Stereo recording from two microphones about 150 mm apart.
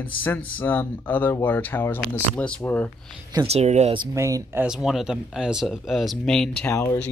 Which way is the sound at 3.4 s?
45° right (ahead or behind).